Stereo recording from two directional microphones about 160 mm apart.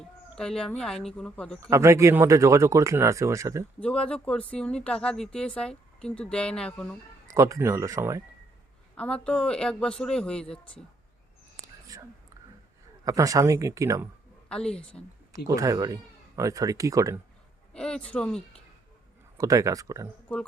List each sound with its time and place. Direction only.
0.3 s speech: 5° left (ahead or behind)
1.7 s speech: 20° right (ahead or behind)
3.8 s speech: 5° left (ahead or behind)
7.3 s speech: 20° right (ahead or behind)
9.0 s speech: 5° left (ahead or behind)
11.6 s whispering: 20° right (ahead or behind)
13.1 s speech: 20° right (ahead or behind)
14.5 s speech: 5° left (ahead or behind)
15.4 s speech: 20° right (ahead or behind)
17.7 s speech: 5° left (ahead or behind)
19.4 s speech: 20° right (ahead or behind)